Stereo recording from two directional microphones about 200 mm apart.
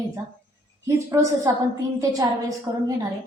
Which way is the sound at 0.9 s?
15° right (ahead or behind).